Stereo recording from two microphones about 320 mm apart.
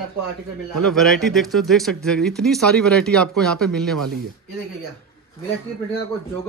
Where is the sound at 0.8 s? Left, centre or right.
Centre.